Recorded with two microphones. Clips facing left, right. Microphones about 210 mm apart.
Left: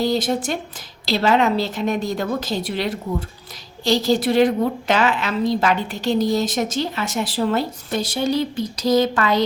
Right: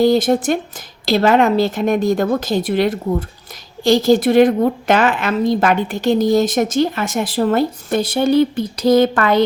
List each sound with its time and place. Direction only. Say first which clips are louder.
0.0 s a woman's voice: right 7 dB; 50° right (ahead or behind)